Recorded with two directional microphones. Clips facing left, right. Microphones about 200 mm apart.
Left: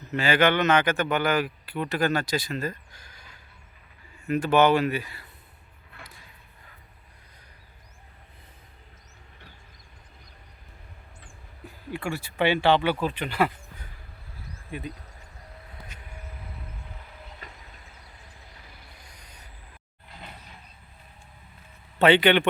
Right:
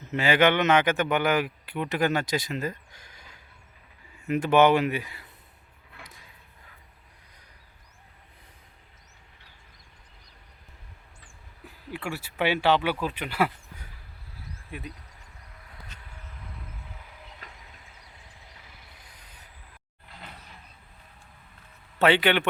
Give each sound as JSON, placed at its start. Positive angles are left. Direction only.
{"t": 0.0, "sound": "speech", "side_deg": -20}
{"t": 11.6, "sound": "speech", "side_deg": -5}
{"t": 15.9, "sound": "vehicle", "side_deg": 10}
{"t": 17.4, "sound": "train", "side_deg": 0}
{"t": 19.1, "sound": "a sound", "side_deg": -5}
{"t": 21.9, "sound": "a man's voice", "side_deg": -5}